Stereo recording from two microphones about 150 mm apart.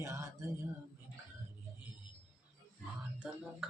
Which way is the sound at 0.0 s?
20° right (ahead or behind).